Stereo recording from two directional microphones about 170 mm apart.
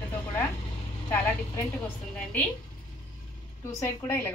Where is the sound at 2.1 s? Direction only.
10° left (ahead or behind).